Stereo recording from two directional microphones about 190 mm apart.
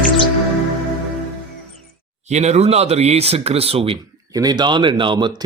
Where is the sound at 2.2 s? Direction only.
35° right (ahead or behind).